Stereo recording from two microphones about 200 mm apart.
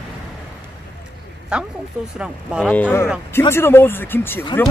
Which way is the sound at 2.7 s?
10° left (ahead or behind).